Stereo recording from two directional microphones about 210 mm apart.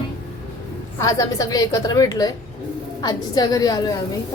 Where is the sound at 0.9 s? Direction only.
15° left (ahead or behind).